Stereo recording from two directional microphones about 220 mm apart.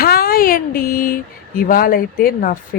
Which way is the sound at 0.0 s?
45° left (ahead or behind).